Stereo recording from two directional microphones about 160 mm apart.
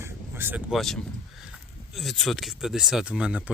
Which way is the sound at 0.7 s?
Centre (ahead or behind).